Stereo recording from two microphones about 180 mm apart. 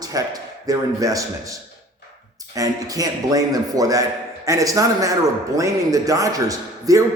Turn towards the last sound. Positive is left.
turn(degrees=-20)  # may be behind; listen again after turning